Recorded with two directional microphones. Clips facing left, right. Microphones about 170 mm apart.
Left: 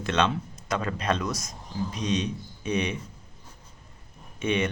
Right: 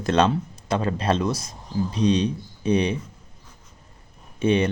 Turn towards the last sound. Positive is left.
turn(degrees=-30)  # may be behind; listen again after turning